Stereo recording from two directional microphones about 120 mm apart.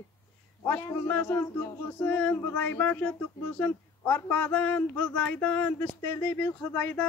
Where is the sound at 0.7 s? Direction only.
20° left (ahead or behind).